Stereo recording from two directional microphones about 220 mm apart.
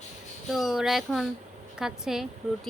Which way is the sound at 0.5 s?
Centre (ahead or behind).